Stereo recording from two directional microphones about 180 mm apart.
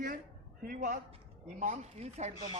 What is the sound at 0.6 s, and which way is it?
A man's voice, 50° right (ahead or behind).